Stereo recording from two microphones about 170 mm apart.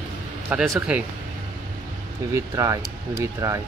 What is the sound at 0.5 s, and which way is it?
Speech, 10° right (ahead or behind).